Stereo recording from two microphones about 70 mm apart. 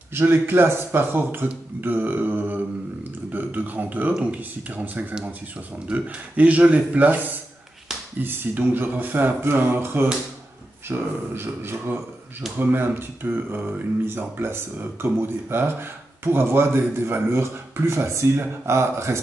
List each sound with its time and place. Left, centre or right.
0.1 s speech: right